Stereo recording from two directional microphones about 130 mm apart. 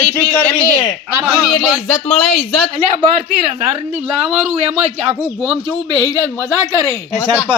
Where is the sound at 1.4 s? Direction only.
5° right (ahead or behind).